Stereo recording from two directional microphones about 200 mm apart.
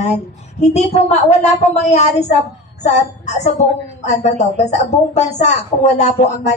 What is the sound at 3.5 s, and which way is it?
Speech, 35° left (ahead or behind).